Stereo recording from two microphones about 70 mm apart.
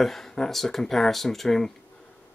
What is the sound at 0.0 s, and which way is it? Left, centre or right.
Speech, centre.